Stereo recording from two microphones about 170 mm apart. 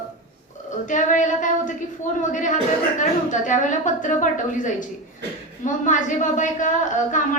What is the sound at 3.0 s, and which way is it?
A woman's voice, 45° left (ahead or behind).